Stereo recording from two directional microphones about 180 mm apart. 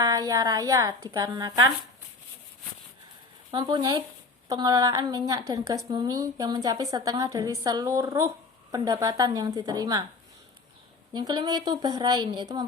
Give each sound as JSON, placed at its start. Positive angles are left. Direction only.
{"t": 0.0, "sound": "a woman's voice", "side_deg": -20}
{"t": 3.5, "sound": "a woman's voice", "side_deg": -25}
{"t": 11.1, "sound": "a woman's voice", "side_deg": -25}